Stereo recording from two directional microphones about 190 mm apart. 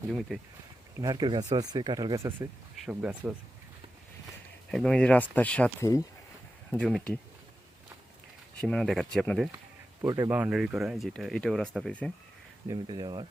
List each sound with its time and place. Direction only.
0.1 s speech: centre (ahead or behind)
0.9 s speech: 20° right (ahead or behind)
4.7 s speech: 5° left (ahead or behind)
6.7 s speech: 5° left (ahead or behind)
8.6 s speech: 5° left (ahead or behind)
10.0 s speech: 15° right (ahead or behind); by 12.1 s 5° left (ahead or behind)
12.6 s speech: 25° right (ahead or behind)